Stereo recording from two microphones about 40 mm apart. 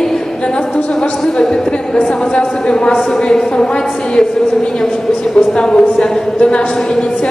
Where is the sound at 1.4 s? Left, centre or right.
Centre.